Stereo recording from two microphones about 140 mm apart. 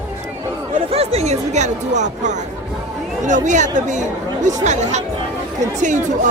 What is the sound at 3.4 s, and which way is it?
Speech, 60° right (ahead or behind).